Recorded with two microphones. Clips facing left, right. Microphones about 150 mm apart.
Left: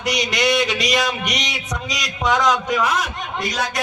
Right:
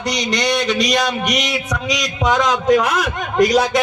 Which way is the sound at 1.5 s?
75° right (ahead or behind).